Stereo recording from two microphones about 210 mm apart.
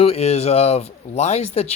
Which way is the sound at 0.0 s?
30° left (ahead or behind).